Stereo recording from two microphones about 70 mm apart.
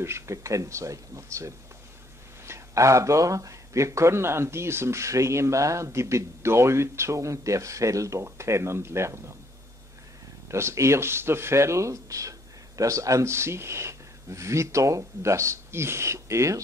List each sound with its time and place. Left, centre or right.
0.0 s speech: right
10.5 s speech: right